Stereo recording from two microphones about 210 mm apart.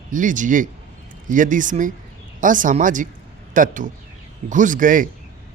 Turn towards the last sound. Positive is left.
turn(degrees=-40)  # may be behind; listen again after turning